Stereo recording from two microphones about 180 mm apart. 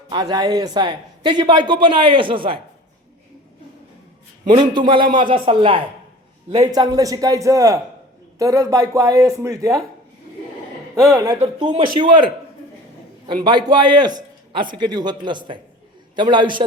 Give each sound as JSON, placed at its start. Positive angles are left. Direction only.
{"t": 0.1, "sound": "a man's voice", "side_deg": -20}
{"t": 4.4, "sound": "a man's voice", "side_deg": -25}
{"t": 5.0, "sound": "speech", "side_deg": -50}
{"t": 5.3, "sound": "a man's voice", "side_deg": -30}
{"t": 11.1, "sound": "a man's voice", "side_deg": -20}